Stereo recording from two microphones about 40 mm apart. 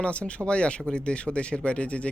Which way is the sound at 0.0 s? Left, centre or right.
Left.